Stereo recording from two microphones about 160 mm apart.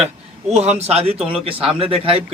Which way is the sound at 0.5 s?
40° right (ahead or behind).